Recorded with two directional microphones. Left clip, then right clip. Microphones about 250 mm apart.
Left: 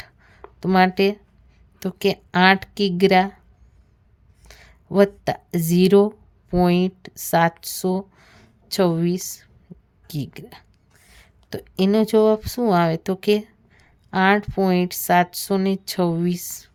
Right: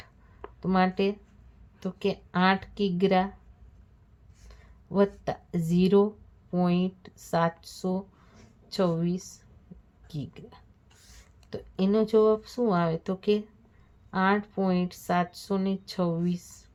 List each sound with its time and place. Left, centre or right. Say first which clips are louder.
0.6 s a woman's voice: left 9 dB; left
4.4 s a woman's voice: left 9 dB; left